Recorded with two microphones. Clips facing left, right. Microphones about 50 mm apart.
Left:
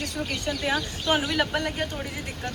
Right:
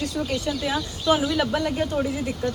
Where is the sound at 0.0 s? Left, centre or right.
Left.